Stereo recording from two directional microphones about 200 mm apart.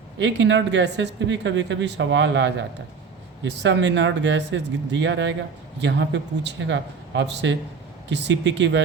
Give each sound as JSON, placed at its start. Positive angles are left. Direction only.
{"t": 0.2, "sound": "speech", "side_deg": -65}